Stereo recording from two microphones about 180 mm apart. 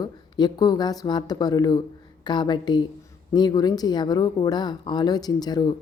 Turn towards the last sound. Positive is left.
turn(degrees=20)  # may be behind; listen again after turning